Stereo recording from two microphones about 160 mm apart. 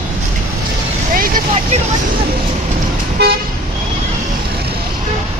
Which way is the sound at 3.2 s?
90° right.